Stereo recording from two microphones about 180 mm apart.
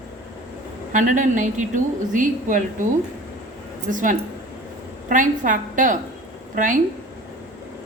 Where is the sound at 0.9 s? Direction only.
45° right (ahead or behind).